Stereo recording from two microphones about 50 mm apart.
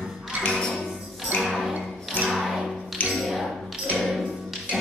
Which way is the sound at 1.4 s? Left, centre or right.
Centre.